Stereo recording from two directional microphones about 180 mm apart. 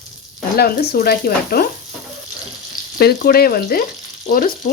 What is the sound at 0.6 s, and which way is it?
Speech, 60° left (ahead or behind).